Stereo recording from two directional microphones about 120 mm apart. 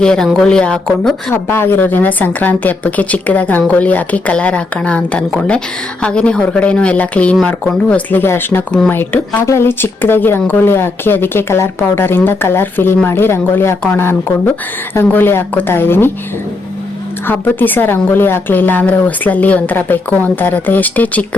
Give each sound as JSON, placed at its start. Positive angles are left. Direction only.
{"t": 0.0, "sound": "a woman's voice", "side_deg": 5}
{"t": 1.3, "sound": "a woman's voice", "side_deg": 20}
{"t": 17.2, "sound": "a woman's voice", "side_deg": 15}